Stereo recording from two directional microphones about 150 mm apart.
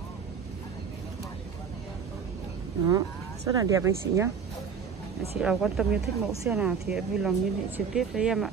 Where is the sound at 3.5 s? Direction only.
25° right (ahead or behind).